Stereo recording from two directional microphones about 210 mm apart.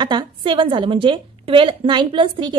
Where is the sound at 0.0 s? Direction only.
20° right (ahead or behind).